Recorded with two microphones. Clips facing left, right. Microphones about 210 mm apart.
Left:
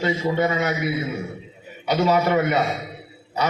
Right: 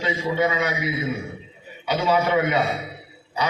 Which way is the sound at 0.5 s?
45° left (ahead or behind).